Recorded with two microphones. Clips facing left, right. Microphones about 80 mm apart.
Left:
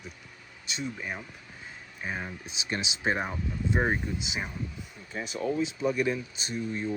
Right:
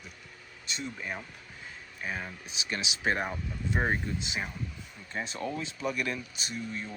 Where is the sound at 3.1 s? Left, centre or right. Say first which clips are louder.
Left 2 dB; centre.